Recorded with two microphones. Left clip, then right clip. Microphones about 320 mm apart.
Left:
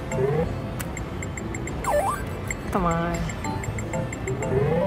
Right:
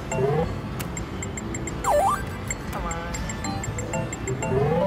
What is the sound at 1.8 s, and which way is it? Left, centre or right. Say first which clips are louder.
Music: right 3 dB; centre.